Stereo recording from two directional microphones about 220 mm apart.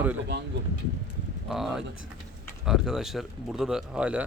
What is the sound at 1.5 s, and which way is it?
Speech, centre (ahead or behind).